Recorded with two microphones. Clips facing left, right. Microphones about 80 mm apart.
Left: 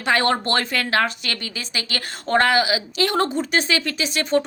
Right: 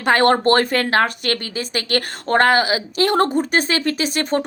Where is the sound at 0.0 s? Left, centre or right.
Right.